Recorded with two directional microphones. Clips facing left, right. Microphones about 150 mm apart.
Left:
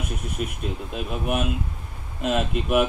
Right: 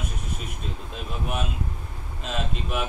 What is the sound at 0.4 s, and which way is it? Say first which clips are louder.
Speech: left 8 dB; 60° left (ahead or behind).